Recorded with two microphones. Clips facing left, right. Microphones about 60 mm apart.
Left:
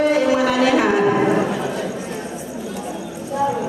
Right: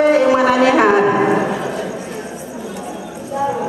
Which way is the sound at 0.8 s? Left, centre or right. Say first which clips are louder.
Right 3 dB; centre.